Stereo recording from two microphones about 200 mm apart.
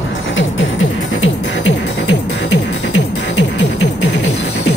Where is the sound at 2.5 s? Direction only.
65° left (ahead or behind).